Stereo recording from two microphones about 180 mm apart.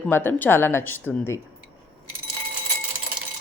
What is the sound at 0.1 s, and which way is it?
A woman's voice, 10° left (ahead or behind).